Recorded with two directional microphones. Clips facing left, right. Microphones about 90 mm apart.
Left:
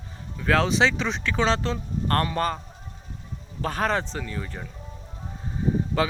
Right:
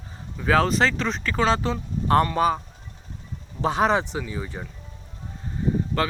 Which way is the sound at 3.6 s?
15° right (ahead or behind).